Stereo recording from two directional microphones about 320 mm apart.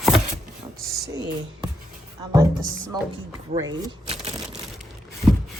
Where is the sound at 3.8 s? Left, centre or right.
Centre.